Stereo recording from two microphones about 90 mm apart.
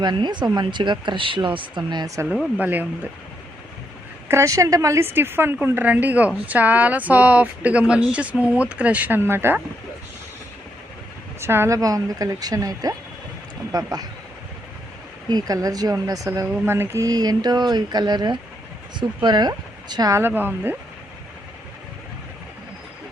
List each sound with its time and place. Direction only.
0.0 s speech: 55° right (ahead or behind)
2.6 s speech: 20° right (ahead or behind)
4.3 s speech: 35° right (ahead or behind)
11.3 s speech: 25° right (ahead or behind)
11.8 s speech: 40° right (ahead or behind)
15.3 s speech: 45° right (ahead or behind)
16.6 s speech: 25° right (ahead or behind)
17.1 s speech: 45° right (ahead or behind)
20.1 s speech: 25° right (ahead or behind)